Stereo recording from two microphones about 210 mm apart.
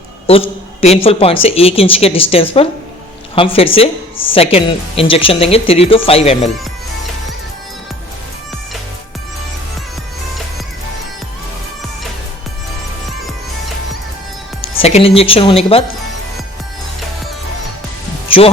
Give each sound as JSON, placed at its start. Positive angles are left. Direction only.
{"t": 0.3, "sound": "a woman's voice", "side_deg": 25}
{"t": 14.6, "sound": "speech", "side_deg": 30}
{"t": 18.3, "sound": "speech", "side_deg": 25}